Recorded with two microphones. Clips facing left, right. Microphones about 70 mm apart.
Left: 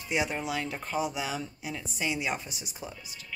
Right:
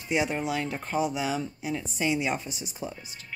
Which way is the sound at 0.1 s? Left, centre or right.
Centre.